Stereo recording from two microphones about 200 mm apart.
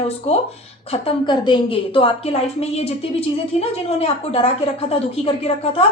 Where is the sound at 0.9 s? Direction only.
25° left (ahead or behind).